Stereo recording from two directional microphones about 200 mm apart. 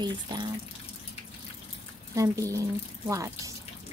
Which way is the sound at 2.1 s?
15° right (ahead or behind).